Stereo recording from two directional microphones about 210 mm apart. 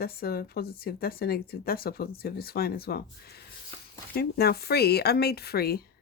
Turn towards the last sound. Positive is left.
turn(degrees=45)  # may be behind; listen again after turning